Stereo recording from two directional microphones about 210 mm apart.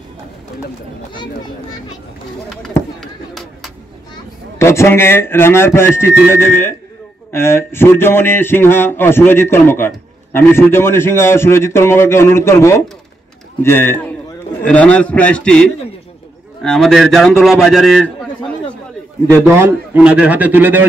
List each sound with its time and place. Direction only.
1.1 s a child's voice: 20° left (ahead or behind)
2.5 s chop: centre (ahead or behind)
4.6 s a man's voice: 15° left (ahead or behind)
19.3 s a man's voice: 10° right (ahead or behind)